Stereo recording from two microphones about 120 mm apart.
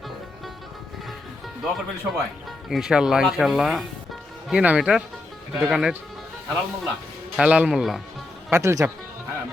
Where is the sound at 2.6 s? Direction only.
5° right (ahead or behind).